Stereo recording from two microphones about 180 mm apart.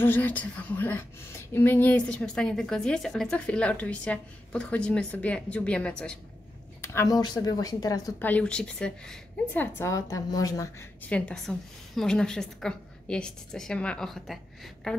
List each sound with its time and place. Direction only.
0.0 s a woman's voice: 10° left (ahead or behind)
8.3 s a woman's voice: 5° left (ahead or behind)
11.1 s a woman's voice: 5° left (ahead or behind)